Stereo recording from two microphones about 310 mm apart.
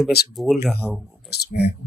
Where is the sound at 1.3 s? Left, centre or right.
Left.